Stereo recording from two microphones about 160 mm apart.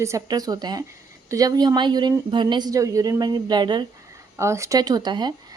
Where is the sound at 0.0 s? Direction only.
20° right (ahead or behind).